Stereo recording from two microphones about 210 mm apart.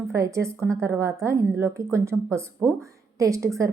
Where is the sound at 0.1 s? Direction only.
15° right (ahead or behind).